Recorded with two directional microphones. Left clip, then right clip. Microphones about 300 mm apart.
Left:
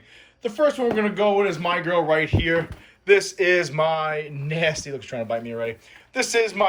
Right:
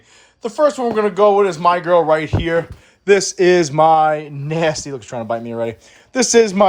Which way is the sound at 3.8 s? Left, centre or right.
Right.